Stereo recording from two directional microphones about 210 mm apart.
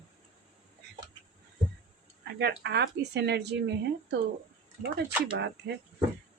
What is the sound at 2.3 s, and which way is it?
A woman's voice, 55° right (ahead or behind).